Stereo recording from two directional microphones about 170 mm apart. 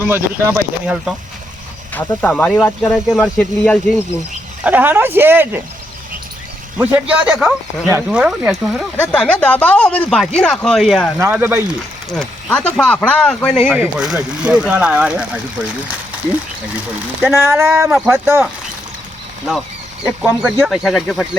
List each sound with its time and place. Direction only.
0.0 s speech: 15° right (ahead or behind)
1.9 s speech: 10° left (ahead or behind)
4.6 s speech: 10° right (ahead or behind)
6.7 s speech: 10° right (ahead or behind)
9.0 s speech: 5° left (ahead or behind)
11.2 s speech: 15° right (ahead or behind)
12.1 s speech: 5° left (ahead or behind)
13.7 s speech: 5° right (ahead or behind)
17.2 s speech: 15° right (ahead or behind)
17.9 s speech: centre (ahead or behind)
20.1 s speech: 10° right (ahead or behind)